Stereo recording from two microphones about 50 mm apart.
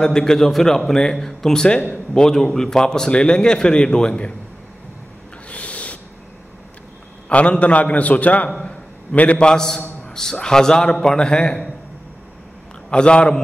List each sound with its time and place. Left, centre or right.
0.0 s a man's voice: centre
5.5 s owl: left
7.2 s a man's voice: left
8.6 s a sound: left
9.4 s a man's voice: centre
12.9 s a man's voice: centre